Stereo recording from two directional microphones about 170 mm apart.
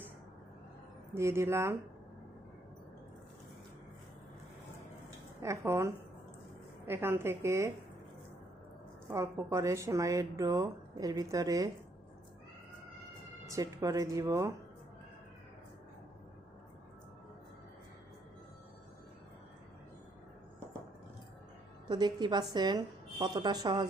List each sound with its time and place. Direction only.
1.1 s a woman's voice: 15° right (ahead or behind)
5.4 s a woman's voice: 15° right (ahead or behind)
9.0 s speech: 15° right (ahead or behind)
13.5 s speech: 20° right (ahead or behind)
21.8 s speech: 25° right (ahead or behind)